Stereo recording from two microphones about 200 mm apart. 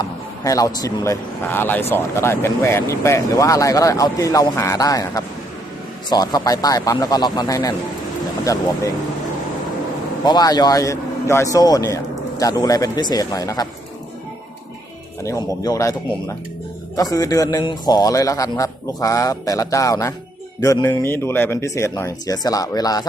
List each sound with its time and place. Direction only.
0.0 s speech: 15° left (ahead or behind)
10.2 s speech: 20° left (ahead or behind)
15.2 s speech: 15° left (ahead or behind)
17.0 s speech: 15° left (ahead or behind)